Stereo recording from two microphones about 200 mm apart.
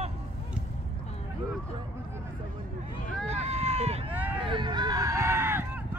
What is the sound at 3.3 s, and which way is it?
Run, 30° right (ahead or behind).